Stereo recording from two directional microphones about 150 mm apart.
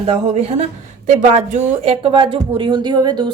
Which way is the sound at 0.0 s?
45° right (ahead or behind).